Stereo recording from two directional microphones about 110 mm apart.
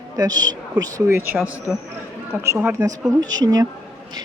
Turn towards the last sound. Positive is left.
turn(degrees=-35)  # may be behind; listen again after turning